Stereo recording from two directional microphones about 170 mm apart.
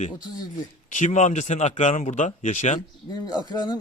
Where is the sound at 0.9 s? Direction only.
50° left (ahead or behind).